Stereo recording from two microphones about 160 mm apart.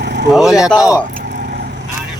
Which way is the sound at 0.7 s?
20° left (ahead or behind).